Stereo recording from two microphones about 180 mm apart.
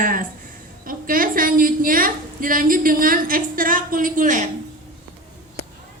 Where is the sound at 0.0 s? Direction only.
50° right (ahead or behind).